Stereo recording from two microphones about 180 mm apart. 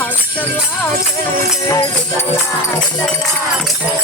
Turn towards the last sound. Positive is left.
turn(degrees=20)  # may be behind; listen again after turning